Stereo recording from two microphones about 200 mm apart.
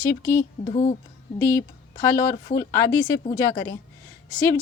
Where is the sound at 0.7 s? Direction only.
30° left (ahead or behind).